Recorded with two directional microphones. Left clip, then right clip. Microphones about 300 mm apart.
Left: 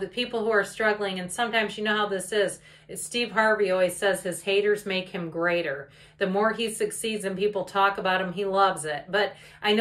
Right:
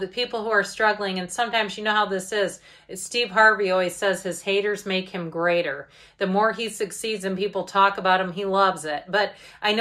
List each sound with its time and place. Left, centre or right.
0.1 s speech: centre